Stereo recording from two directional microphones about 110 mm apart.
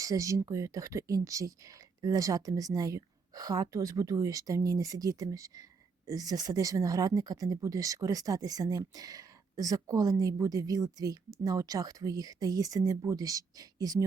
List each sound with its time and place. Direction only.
0.0 s speech: 30° right (ahead or behind)